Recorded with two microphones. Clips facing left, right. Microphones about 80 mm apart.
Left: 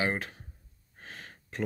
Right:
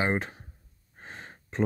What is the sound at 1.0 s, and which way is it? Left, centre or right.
Gasp, right.